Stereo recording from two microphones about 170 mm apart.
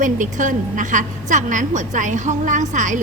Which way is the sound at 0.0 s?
50° right (ahead or behind).